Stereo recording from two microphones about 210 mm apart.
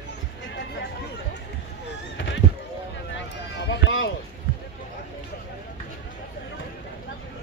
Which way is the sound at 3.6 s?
60° left (ahead or behind).